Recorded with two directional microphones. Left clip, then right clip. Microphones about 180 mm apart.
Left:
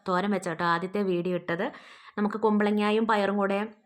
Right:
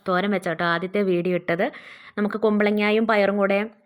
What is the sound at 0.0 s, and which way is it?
A woman's voice, 15° right (ahead or behind).